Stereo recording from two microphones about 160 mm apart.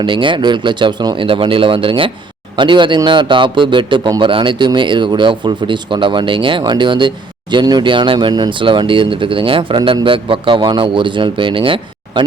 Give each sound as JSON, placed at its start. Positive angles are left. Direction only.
{"t": 0.0, "sound": "a man's voice", "side_deg": -30}